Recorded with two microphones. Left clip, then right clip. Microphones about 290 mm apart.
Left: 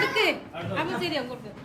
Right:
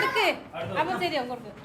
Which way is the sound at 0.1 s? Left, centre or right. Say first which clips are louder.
Even; right.